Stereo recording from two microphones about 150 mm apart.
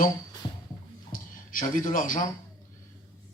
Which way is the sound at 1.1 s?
65° left (ahead or behind).